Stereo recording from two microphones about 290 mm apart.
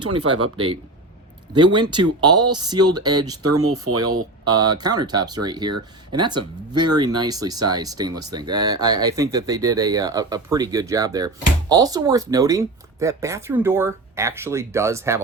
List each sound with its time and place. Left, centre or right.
0.0 s speech: right
0.5 s speech: centre
3.6 s speech: right
4.4 s speech: centre